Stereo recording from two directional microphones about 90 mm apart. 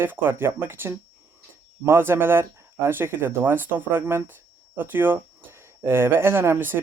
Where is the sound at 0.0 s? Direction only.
25° right (ahead or behind).